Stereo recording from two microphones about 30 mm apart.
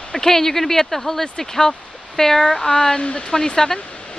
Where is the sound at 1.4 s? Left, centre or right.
Left.